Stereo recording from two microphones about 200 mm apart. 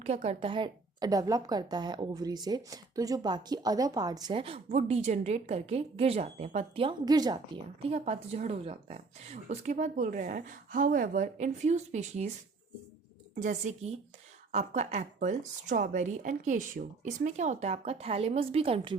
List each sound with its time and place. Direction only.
0.0 s a woman's voice: 35° right (ahead or behind)
13.4 s a woman's voice: 35° right (ahead or behind)